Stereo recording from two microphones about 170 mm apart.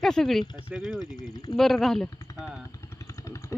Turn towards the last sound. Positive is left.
turn(degrees=20)  # may be behind; listen again after turning